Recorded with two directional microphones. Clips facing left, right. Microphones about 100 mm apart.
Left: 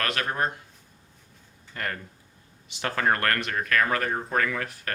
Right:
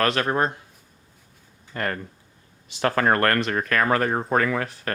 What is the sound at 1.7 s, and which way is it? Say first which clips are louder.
Speech: right 5 dB; 40° right (ahead or behind).